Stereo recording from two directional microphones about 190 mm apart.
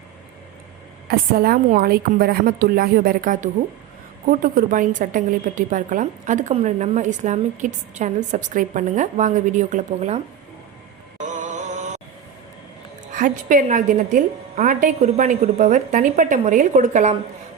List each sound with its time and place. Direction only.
1.0 s a woman's voice: 50° right (ahead or behind)
11.2 s music: 40° right (ahead or behind)
13.1 s a woman's voice: 45° right (ahead or behind)